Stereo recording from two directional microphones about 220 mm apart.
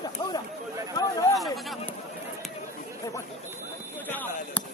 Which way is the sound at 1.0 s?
20° left (ahead or behind).